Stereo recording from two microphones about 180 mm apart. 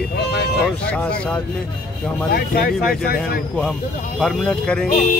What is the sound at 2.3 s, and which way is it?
Speech, 55° left (ahead or behind).